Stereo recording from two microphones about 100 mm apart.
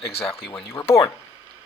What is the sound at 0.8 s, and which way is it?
Speech, 55° left (ahead or behind).